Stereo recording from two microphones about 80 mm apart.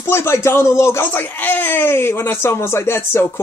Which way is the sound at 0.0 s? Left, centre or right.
Left.